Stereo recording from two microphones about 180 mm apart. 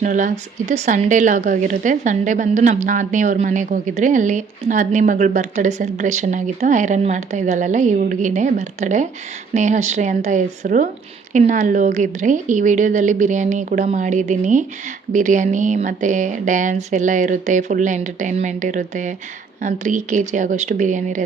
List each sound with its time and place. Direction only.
0.0 s a woman's voice: 45° right (ahead or behind)